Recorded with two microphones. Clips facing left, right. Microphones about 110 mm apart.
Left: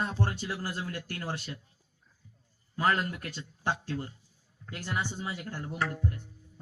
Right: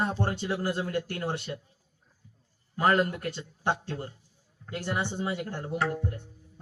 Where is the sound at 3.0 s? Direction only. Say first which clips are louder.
Right 7 dB; 35° right (ahead or behind).